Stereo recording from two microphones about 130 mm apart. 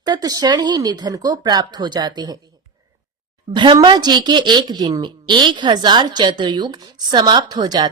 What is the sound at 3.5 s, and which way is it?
A woman's voice, 35° right (ahead or behind).